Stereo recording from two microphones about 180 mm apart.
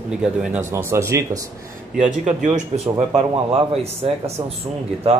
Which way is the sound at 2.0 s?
40° right (ahead or behind).